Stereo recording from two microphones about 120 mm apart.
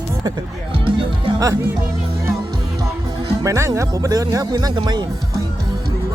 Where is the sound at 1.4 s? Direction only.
30° right (ahead or behind).